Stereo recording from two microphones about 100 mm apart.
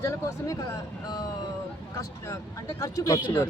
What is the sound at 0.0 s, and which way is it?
Speech, 30° left (ahead or behind).